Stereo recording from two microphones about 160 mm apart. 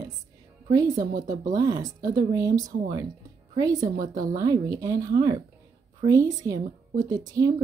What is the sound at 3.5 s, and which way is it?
Speech, 25° right (ahead or behind).